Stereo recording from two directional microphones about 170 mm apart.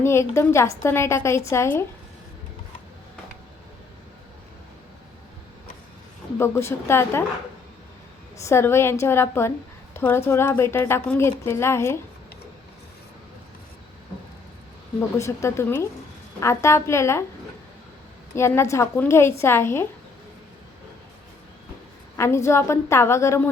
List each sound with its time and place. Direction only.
0.0 s a woman's voice: 15° left (ahead or behind)
6.4 s a woman's voice: 15° left (ahead or behind)
8.4 s a woman's voice: 15° left (ahead or behind)
15.2 s a woman's voice: 15° left (ahead or behind)
18.3 s a woman's voice: 15° left (ahead or behind)
22.2 s a woman's voice: 15° left (ahead or behind)